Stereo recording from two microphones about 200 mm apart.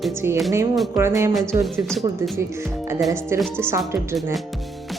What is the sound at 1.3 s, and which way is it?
Music, centre (ahead or behind).